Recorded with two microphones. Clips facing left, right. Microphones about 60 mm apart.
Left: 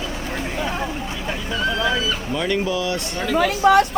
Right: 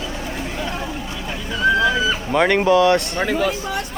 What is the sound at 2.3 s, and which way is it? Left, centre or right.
Speech, right.